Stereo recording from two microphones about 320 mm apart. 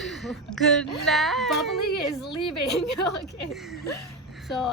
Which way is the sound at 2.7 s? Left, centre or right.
Left.